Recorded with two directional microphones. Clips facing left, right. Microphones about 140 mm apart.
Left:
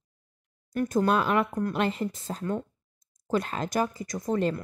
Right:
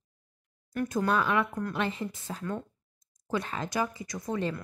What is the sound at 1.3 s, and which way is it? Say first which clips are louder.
Speech: left 3 dB; 40° left (ahead or behind).